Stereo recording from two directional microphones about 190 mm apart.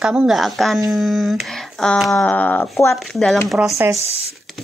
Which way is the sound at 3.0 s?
Centre (ahead or behind).